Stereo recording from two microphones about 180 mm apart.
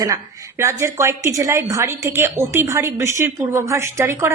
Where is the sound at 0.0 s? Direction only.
15° right (ahead or behind).